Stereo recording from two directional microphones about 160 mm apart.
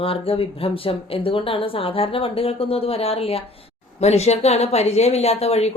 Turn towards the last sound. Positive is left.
turn(degrees=40)  # may be behind; listen again after turning